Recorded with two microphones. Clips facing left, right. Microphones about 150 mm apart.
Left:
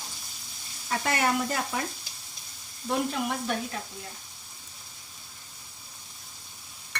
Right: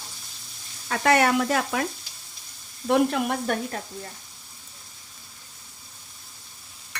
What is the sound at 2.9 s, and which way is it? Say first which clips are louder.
Frying: right 7 dB; 65° right (ahead or behind).